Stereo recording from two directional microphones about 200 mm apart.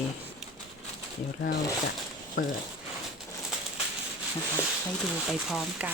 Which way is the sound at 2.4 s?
45° left (ahead or behind).